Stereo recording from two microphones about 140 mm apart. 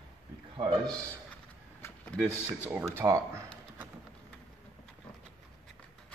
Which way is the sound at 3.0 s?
20° right (ahead or behind).